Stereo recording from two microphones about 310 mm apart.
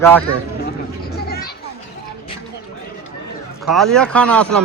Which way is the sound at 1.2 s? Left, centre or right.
Left.